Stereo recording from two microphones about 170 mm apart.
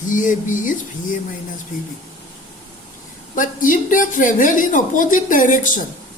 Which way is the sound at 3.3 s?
50° left (ahead or behind).